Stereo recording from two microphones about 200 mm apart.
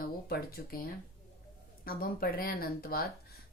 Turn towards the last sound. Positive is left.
turn(degrees=50)  # may be behind; listen again after turning